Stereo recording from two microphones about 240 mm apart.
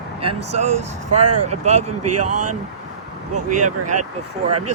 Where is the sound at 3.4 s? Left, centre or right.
Right.